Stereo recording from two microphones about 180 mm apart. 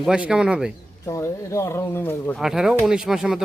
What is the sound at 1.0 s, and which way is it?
Speech, 15° left (ahead or behind).